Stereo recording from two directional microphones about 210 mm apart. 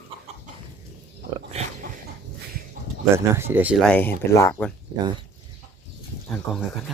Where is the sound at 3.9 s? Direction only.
10° left (ahead or behind).